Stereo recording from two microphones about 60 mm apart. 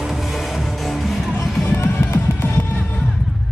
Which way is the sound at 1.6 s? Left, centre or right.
Left.